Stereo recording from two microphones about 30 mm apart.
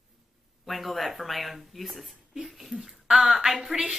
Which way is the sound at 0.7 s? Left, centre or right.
Centre.